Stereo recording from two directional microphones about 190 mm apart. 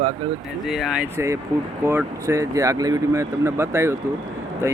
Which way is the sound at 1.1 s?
15° right (ahead or behind).